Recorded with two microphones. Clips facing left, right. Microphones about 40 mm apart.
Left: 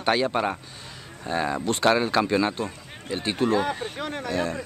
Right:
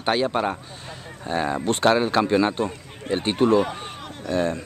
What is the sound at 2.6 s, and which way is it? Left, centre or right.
Speech, right.